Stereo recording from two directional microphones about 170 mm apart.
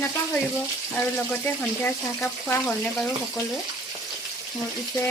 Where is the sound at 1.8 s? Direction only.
5° left (ahead or behind).